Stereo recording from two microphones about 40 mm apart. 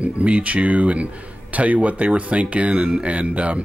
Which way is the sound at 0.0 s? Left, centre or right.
Right.